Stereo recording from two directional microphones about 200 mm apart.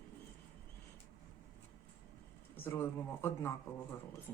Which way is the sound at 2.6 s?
10° left (ahead or behind).